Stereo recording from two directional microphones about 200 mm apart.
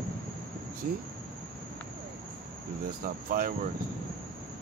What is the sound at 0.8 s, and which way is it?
Speech, 45° right (ahead or behind).